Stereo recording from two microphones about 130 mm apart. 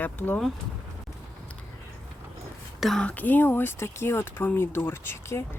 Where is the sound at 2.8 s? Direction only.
5° left (ahead or behind).